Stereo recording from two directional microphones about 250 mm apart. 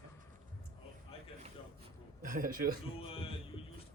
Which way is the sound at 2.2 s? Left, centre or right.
Right.